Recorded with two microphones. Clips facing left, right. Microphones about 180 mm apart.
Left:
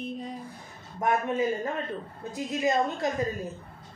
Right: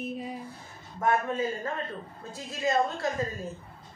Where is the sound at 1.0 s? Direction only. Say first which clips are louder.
Left 1 dB; 20° left (ahead or behind).